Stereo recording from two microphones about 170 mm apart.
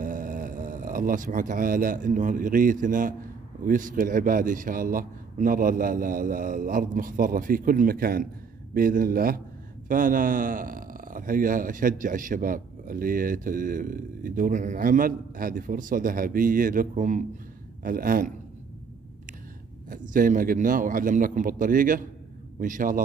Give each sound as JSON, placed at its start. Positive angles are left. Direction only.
{"t": 0.0, "sound": "a man's voice", "side_deg": -50}
{"t": 19.9, "sound": "a man's voice", "side_deg": -50}